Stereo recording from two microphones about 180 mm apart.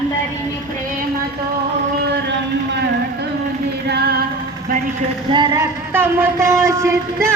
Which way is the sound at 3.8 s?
65° right (ahead or behind).